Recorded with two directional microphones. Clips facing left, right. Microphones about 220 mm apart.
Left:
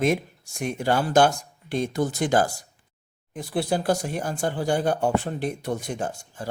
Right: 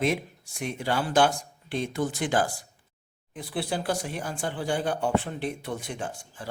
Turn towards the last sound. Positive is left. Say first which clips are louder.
# left 5 dB
turn(degrees=40)  # may be behind; listen again after turning